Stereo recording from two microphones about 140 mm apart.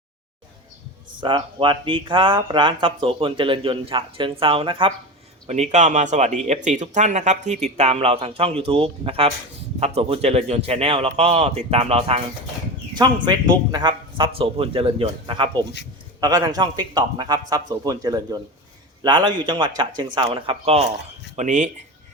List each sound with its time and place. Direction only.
1.2 s speech: 35° right (ahead or behind)
5.5 s speech: 55° right (ahead or behind)
13.0 s a man's voice: 30° right (ahead or behind)
21.3 s speech: 60° right (ahead or behind)